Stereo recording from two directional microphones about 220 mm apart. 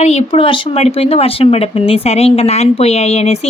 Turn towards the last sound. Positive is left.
turn(degrees=30)  # may be behind; listen again after turning